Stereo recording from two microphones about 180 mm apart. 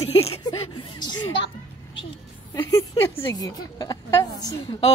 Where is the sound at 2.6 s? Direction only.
15° left (ahead or behind).